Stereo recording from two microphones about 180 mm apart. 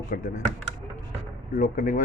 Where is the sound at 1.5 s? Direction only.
45° left (ahead or behind).